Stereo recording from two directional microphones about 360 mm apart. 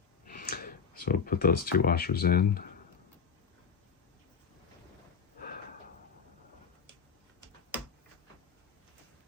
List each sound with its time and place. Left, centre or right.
0.3 s speech: left